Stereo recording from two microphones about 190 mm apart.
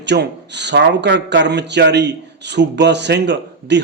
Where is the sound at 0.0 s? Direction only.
65° right (ahead or behind).